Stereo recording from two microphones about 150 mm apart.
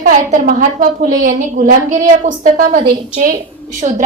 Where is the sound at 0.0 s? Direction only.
60° right (ahead or behind).